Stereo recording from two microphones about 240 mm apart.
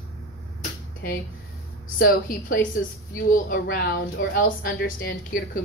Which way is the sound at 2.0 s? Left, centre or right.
Left.